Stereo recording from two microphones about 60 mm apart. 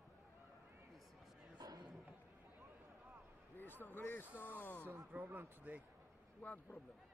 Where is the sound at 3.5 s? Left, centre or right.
Left.